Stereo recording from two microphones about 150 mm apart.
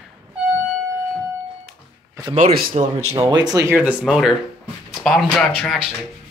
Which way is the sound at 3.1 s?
30° right (ahead or behind).